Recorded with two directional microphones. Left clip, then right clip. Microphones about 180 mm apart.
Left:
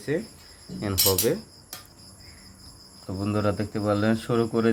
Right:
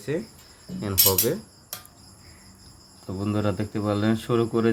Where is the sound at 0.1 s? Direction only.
5° right (ahead or behind).